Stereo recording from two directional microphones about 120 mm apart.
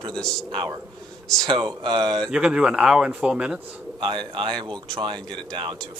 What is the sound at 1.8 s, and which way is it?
Speech, 35° right (ahead or behind).